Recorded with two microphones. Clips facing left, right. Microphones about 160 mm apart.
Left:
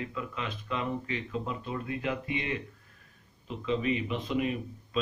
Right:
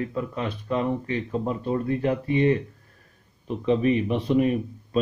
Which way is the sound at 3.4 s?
50° right (ahead or behind).